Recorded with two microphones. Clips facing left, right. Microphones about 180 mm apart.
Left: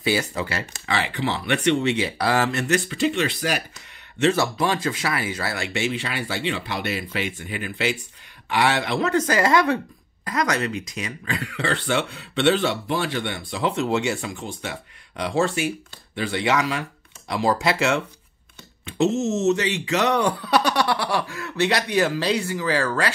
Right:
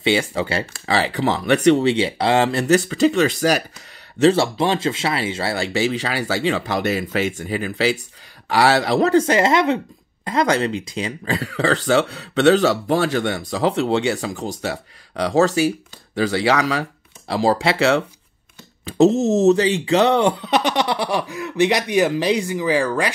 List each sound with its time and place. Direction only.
0.0 s speech: 25° right (ahead or behind); by 3.6 s 40° right (ahead or behind)
4.2 s speech: 30° right (ahead or behind)